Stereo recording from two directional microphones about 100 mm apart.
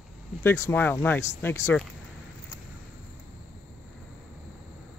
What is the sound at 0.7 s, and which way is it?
Speech, 20° left (ahead or behind).